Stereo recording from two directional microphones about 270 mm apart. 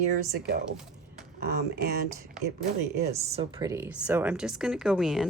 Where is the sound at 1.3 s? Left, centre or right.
Right.